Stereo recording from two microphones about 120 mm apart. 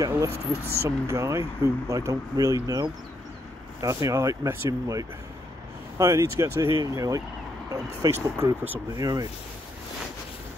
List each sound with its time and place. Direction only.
0.8 s speech: 25° right (ahead or behind)
8.9 s speech: 30° right (ahead or behind)